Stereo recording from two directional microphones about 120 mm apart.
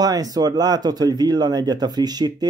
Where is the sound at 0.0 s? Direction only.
30° right (ahead or behind).